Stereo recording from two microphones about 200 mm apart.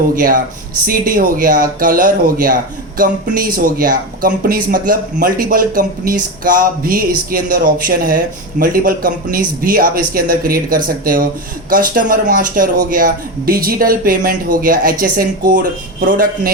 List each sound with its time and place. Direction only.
0.2 s speech: 45° right (ahead or behind)